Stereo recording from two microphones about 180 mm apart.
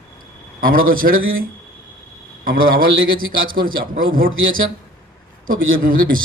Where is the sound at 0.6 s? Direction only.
50° right (ahead or behind).